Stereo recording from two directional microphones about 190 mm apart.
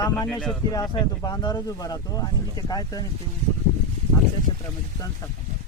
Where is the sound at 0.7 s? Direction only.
20° left (ahead or behind).